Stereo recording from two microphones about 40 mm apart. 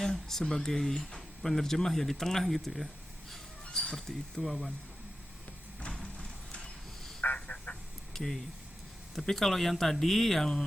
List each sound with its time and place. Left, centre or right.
0.0 s speech: centre
3.7 s a sound: centre
3.9 s speech: centre
5.8 s a sound: left
7.5 s quack: left
8.1 s speech: centre